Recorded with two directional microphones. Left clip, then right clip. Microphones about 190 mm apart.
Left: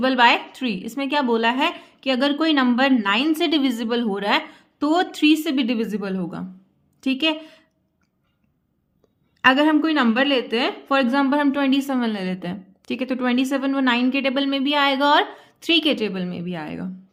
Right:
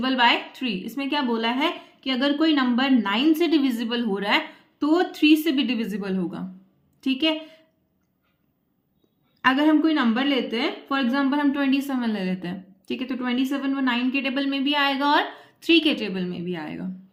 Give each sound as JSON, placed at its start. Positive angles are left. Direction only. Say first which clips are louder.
{"t": 0.0, "sound": "a woman's voice", "louder": "left 4 dB", "side_deg": 45}
{"t": 9.4, "sound": "speech", "louder": "left 3 dB", "side_deg": 45}